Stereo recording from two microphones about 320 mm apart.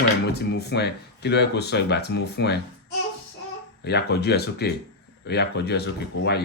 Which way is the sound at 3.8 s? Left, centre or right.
Left.